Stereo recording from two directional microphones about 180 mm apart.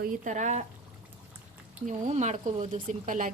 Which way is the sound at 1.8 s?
40° right (ahead or behind).